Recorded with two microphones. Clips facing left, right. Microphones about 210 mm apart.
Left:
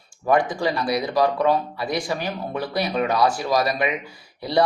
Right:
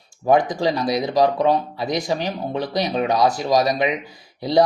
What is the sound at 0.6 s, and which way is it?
Speech, 20° right (ahead or behind).